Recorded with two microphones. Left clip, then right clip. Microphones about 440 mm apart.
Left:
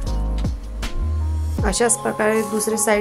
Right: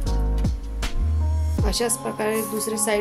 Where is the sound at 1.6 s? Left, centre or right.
Right.